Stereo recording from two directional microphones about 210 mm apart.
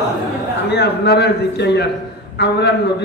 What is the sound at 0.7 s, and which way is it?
A man's voice, 50° left (ahead or behind).